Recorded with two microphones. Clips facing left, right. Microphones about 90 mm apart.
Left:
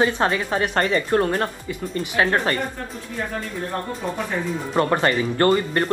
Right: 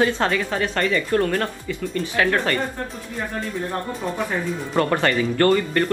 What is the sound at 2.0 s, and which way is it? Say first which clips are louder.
Speech: left 1 dB; 20° left (ahead or behind).